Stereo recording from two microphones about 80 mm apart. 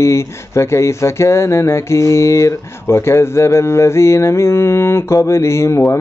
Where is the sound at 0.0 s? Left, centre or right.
Left.